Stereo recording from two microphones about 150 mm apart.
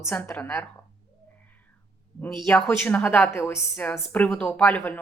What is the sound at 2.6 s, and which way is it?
A woman's voice, 10° left (ahead or behind).